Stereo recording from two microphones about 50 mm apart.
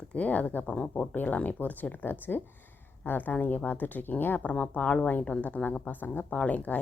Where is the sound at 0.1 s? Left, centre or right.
Left.